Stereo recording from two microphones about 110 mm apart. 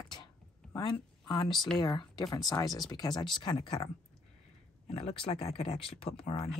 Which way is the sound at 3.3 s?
50° left (ahead or behind).